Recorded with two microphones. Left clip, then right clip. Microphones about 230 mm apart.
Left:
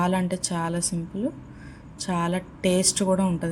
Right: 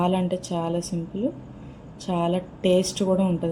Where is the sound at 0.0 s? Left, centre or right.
Left.